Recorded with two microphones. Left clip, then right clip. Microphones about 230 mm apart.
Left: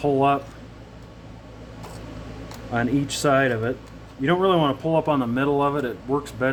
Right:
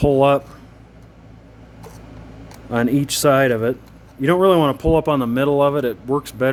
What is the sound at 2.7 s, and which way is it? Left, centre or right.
A man's voice, right.